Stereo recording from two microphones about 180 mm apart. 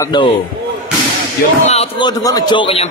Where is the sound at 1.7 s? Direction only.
30° left (ahead or behind).